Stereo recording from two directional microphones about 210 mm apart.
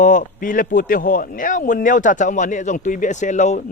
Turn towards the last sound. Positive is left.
turn(degrees=35)  # may be behind; listen again after turning